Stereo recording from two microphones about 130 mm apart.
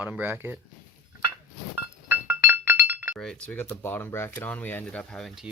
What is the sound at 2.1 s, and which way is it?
Chink, 15° right (ahead or behind).